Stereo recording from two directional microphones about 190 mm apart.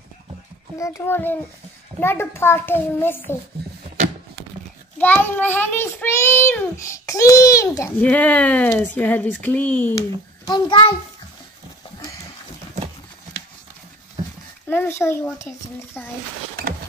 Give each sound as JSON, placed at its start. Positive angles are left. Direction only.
{"t": 0.7, "sound": "a child's voice", "side_deg": 15}
{"t": 4.9, "sound": "a child's voice", "side_deg": 10}
{"t": 10.4, "sound": "a child's voice", "side_deg": 20}
{"t": 14.7, "sound": "a child's voice", "side_deg": 10}